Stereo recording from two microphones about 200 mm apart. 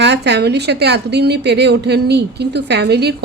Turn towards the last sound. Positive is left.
turn(degrees=-55)  # may be behind; listen again after turning